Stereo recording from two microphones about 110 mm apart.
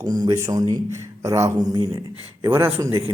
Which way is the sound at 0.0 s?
35° right (ahead or behind).